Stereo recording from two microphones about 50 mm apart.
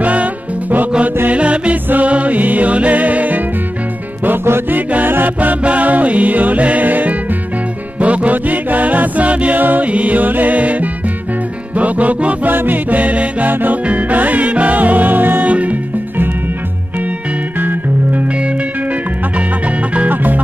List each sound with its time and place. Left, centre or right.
0.0 s music: right
4.5 s music: right
4.7 s music: right
12.4 s music: right
13.5 s music: right
15.4 s music: right
17.6 s music: right
19.9 s music: right